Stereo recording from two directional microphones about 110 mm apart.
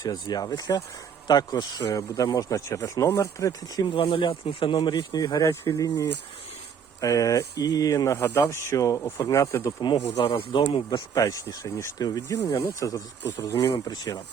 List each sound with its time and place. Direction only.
0.0 s speech: 35° left (ahead or behind)
3.8 s speech: 50° left (ahead or behind); by 9.7 s 30° left (ahead or behind)
9.8 s speech: 55° left (ahead or behind)
10.8 s speech: 35° left (ahead or behind)
13.8 s speech: 35° left (ahead or behind)